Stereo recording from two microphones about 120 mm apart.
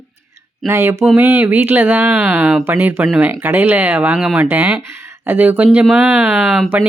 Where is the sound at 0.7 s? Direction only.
20° right (ahead or behind).